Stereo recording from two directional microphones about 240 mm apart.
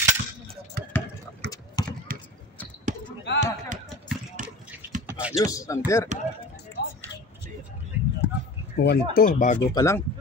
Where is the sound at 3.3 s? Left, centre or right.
Left.